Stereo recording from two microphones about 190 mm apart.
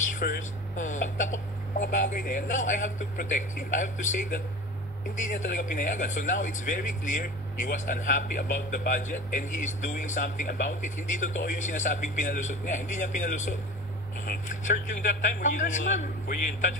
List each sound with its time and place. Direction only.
0.2 s speech: 45° left (ahead or behind)